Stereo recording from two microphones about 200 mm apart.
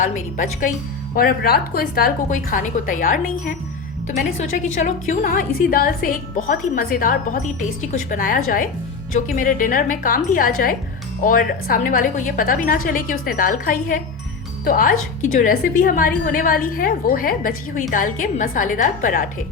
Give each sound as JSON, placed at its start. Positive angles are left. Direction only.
{"t": 0.0, "sound": "a woman's voice", "side_deg": 40}
{"t": 4.5, "sound": "a woman's voice", "side_deg": 40}